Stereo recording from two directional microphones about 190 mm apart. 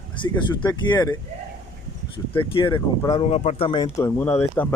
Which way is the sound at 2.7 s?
15° left (ahead or behind).